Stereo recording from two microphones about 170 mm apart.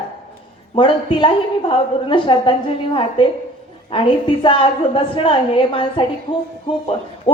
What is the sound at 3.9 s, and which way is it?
A woman's voice, 30° left (ahead or behind).